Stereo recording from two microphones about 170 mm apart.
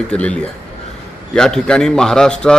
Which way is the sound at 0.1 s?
5° left (ahead or behind).